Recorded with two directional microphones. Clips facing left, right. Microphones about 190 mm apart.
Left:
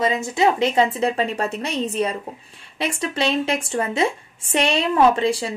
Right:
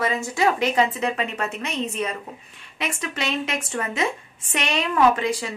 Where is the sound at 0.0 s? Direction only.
20° left (ahead or behind).